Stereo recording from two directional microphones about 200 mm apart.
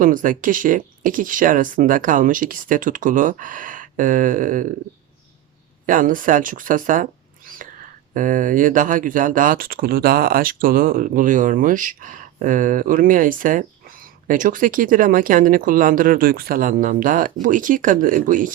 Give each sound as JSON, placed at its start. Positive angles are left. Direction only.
{"t": 0.0, "sound": "speech", "side_deg": -40}
{"t": 5.8, "sound": "speech", "side_deg": -45}